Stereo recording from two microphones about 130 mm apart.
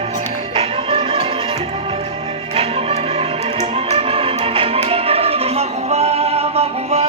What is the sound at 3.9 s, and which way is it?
Music, 50° right (ahead or behind).